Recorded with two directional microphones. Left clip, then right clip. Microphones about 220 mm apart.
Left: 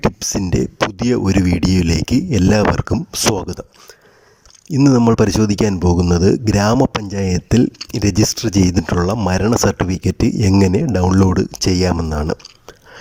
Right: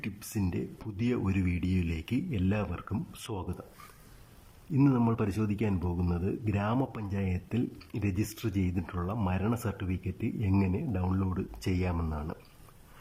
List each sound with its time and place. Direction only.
0.2 s speech: 35° left (ahead or behind)
4.7 s speech: 40° left (ahead or behind)